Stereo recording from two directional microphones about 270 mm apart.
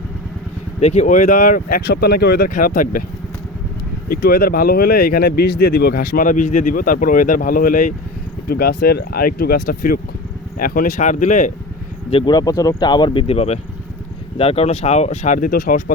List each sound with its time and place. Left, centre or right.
0.8 s speech: left
4.1 s speech: left
12.1 s speech: centre; by 15.8 s left